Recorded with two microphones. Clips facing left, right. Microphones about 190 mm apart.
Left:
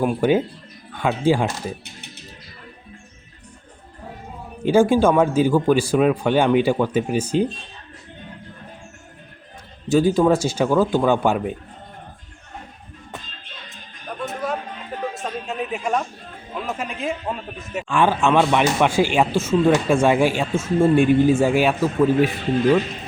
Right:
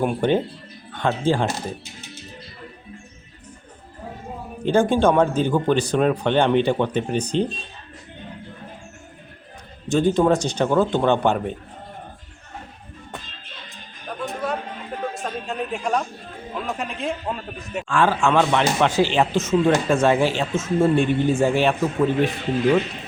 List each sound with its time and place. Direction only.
0.0 s a man's voice: 5° left (ahead or behind)
1.8 s music: 60° left (ahead or behind)
4.6 s speech: 10° left (ahead or behind)
9.9 s speech: 5° left (ahead or behind)
14.2 s chatter: centre (ahead or behind)
15.0 s a sound: centre (ahead or behind)
16.6 s a man's voice: centre (ahead or behind)
17.8 s speech: 15° left (ahead or behind)